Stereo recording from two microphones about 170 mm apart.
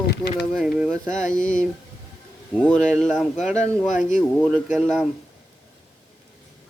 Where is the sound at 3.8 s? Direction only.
50° left (ahead or behind).